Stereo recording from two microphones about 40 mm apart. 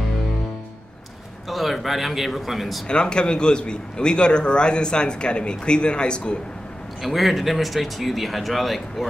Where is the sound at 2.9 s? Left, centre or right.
Left.